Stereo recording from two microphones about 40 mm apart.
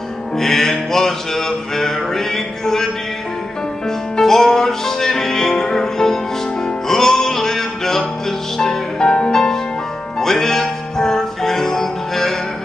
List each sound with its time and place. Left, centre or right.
0.4 s music: centre
4.2 s music: centre